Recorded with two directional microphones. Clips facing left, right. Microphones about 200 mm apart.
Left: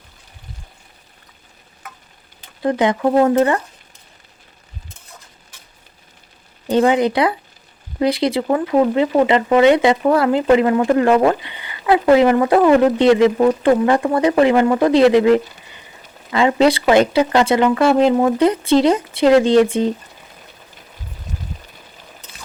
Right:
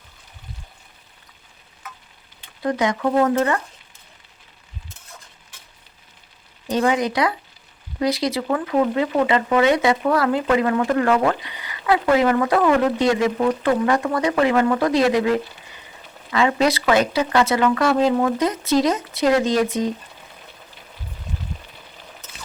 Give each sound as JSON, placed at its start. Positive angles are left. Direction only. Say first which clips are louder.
{"t": 2.6, "sound": "speech", "louder": "left 4 dB", "side_deg": 30}
{"t": 6.7, "sound": "speech", "louder": "left 5 dB", "side_deg": 30}